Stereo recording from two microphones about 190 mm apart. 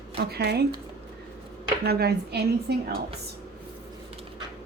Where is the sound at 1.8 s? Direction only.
55° right (ahead or behind).